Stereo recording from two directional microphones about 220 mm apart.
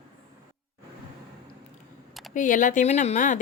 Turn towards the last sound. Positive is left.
turn(degrees=35)  # may be behind; listen again after turning